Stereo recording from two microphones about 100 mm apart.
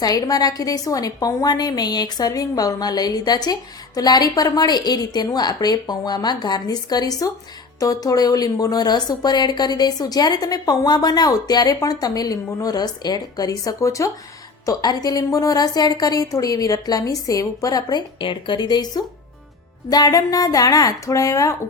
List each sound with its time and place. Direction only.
0.0 s a woman's voice: 40° left (ahead or behind)
18.2 s a woman's voice: 55° left (ahead or behind); by 21.5 s 35° left (ahead or behind)